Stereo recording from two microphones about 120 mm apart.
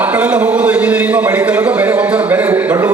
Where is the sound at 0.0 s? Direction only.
10° right (ahead or behind).